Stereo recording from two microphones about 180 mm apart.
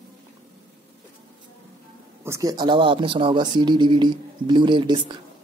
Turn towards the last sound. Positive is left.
turn(degrees=-25)  # may be behind; listen again after turning